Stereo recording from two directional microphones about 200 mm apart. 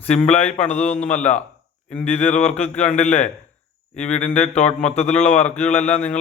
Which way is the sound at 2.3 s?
35° left (ahead or behind).